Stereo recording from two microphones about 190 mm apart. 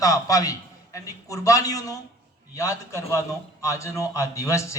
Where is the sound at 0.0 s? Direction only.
20° left (ahead or behind).